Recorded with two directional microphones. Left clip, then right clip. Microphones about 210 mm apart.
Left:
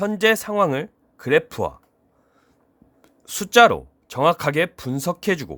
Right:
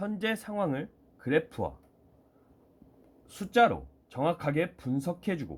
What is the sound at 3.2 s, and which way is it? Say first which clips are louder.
Speech: left 11 dB; 55° left (ahead or behind).